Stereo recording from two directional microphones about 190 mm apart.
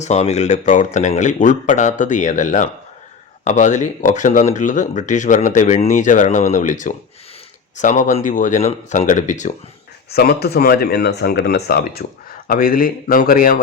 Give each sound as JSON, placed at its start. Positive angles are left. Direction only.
{"t": 0.0, "sound": "speech", "side_deg": 35}
{"t": 10.1, "sound": "speech", "side_deg": 55}